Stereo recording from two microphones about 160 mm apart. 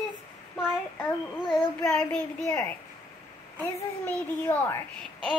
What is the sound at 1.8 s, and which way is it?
Speech, 5° left (ahead or behind).